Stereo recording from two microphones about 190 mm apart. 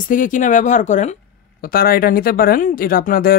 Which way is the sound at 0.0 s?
45° left (ahead or behind).